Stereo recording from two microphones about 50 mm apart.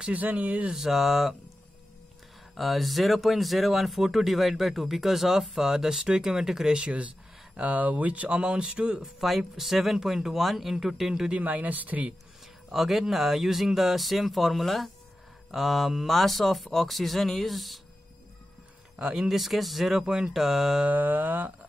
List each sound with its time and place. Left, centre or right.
0.1 s speech: right
0.7 s speech: centre
2.5 s speech: centre
9.0 s speech: centre
11.3 s speech: right
12.7 s speech: centre
18.9 s speech: centre
20.0 s speech: centre
20.8 s speech: right